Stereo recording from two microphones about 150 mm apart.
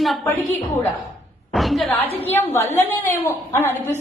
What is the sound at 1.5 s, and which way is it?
Speech, centre (ahead or behind).